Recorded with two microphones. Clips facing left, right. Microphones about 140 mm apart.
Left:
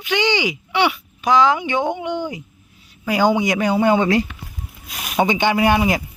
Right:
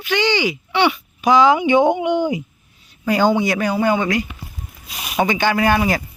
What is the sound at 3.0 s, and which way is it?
Speech, 10° left (ahead or behind).